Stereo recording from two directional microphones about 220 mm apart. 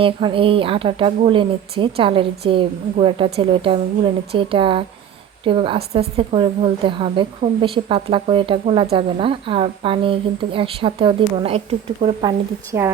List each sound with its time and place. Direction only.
0.0 s a woman's voice: 25° right (ahead or behind)
12.7 s a woman's voice: 15° right (ahead or behind)